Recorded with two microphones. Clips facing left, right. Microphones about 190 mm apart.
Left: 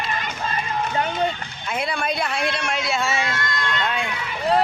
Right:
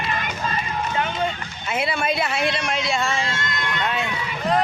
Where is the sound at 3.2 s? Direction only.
25° right (ahead or behind).